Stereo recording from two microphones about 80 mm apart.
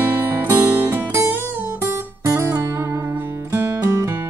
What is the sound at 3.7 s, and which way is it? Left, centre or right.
Music, right.